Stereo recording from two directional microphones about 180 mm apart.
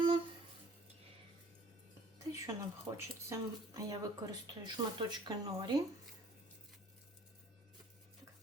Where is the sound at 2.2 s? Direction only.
15° right (ahead or behind).